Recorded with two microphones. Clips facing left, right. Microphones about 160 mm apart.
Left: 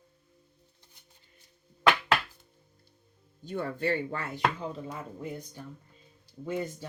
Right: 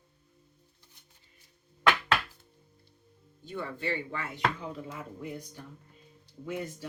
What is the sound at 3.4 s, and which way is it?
Speech, 40° left (ahead or behind).